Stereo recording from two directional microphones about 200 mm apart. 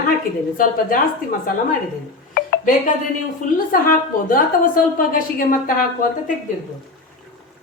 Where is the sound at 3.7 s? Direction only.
45° left (ahead or behind).